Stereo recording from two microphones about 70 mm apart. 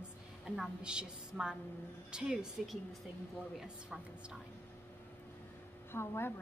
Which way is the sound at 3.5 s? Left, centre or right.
Centre.